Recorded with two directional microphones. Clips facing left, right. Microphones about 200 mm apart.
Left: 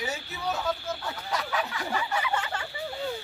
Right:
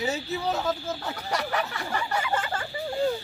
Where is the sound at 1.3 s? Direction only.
65° right (ahead or behind).